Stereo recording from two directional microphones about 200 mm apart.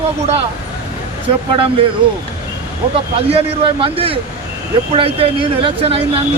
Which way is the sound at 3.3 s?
30° right (ahead or behind).